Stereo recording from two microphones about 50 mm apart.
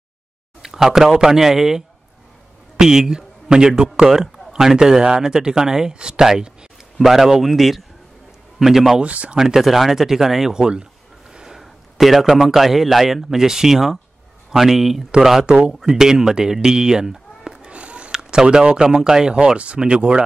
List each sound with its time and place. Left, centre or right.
0.6 s a man's voice: centre
9.0 s speech: right
9.4 s a man's voice: centre
17.6 s a sound: right
18.1 s a man's voice: centre